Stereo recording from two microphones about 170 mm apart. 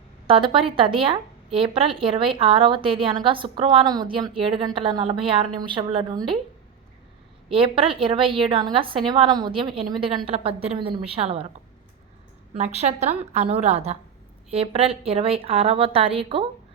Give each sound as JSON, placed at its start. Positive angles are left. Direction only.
{"t": 0.3, "sound": "a woman's voice", "side_deg": -30}
{"t": 7.5, "sound": "a woman's voice", "side_deg": -30}
{"t": 12.5, "sound": "a woman's voice", "side_deg": -40}